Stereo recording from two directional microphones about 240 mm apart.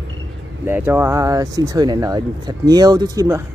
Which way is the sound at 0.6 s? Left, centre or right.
Centre.